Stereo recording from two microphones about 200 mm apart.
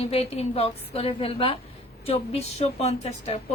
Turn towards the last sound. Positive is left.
turn(degrees=30)  # may be behind; listen again after turning